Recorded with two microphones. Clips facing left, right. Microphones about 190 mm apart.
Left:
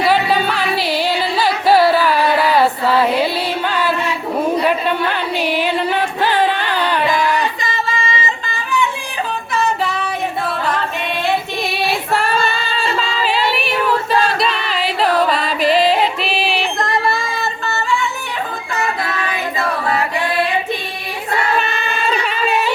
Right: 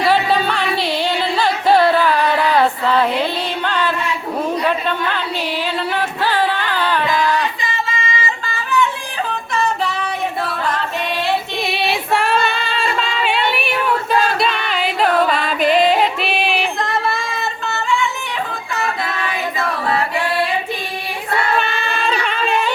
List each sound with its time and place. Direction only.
0.0 s music: centre (ahead or behind)
11.7 s female singing: centre (ahead or behind)
21.6 s a sound: 5° left (ahead or behind)